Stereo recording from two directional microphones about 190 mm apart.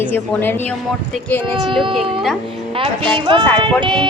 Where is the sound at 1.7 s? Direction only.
25° right (ahead or behind).